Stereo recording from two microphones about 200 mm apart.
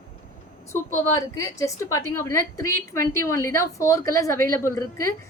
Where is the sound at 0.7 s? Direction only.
15° left (ahead or behind).